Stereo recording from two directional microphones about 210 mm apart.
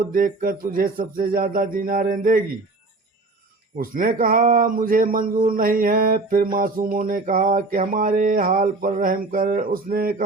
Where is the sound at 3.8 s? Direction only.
40° right (ahead or behind).